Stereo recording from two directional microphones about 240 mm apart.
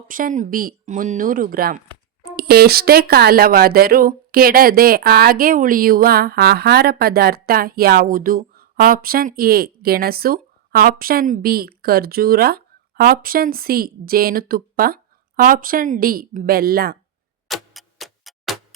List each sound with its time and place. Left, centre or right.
0.1 s speech: right
17.5 s clock: centre